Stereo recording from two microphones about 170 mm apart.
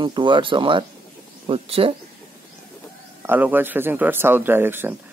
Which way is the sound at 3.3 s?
10° right (ahead or behind).